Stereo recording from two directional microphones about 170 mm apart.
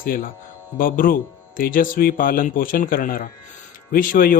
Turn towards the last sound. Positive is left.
turn(degrees=55)  # may be behind; listen again after turning